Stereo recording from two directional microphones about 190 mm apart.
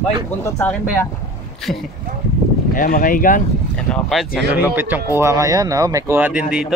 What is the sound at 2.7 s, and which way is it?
Speech, 45° left (ahead or behind).